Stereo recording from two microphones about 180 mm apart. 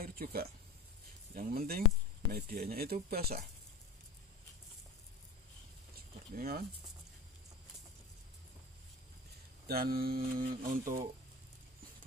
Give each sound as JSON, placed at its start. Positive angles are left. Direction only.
{"t": 0.0, "sound": "a sound", "side_deg": -55}
{"t": 1.3, "sound": "speech", "side_deg": -55}
{"t": 5.9, "sound": "speech", "side_deg": -55}
{"t": 9.7, "sound": "speech", "side_deg": -55}